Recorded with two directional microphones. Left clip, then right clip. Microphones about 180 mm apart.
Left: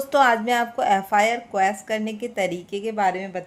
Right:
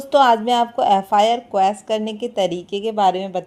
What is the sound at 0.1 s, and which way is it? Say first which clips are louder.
A woman's voice: right 4 dB; 20° right (ahead or behind).